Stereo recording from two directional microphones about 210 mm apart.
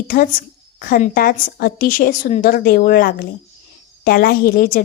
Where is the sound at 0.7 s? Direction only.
40° left (ahead or behind).